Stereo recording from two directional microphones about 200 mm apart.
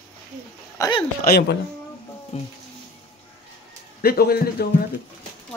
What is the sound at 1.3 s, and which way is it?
Speech, 55° left (ahead or behind).